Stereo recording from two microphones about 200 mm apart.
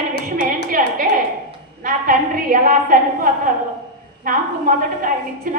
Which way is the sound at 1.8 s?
45° right (ahead or behind).